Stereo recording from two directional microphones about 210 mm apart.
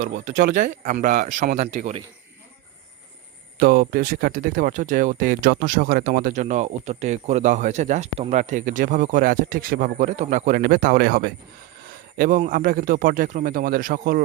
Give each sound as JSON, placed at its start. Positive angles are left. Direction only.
{"t": 0.0, "sound": "speech", "side_deg": -35}
{"t": 3.6, "sound": "speech", "side_deg": -45}